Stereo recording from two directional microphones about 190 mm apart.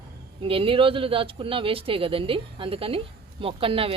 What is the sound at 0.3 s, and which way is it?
Speech, 30° right (ahead or behind).